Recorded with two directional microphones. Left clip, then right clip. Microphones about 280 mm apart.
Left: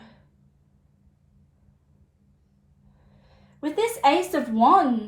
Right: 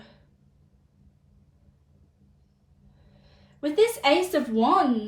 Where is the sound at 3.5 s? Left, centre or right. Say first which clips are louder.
Right 3 dB; left.